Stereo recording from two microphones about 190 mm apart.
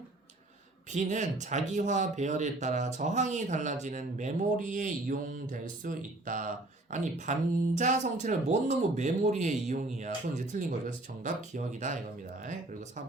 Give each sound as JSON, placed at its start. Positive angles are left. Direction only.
{"t": 0.9, "sound": "speech", "side_deg": -40}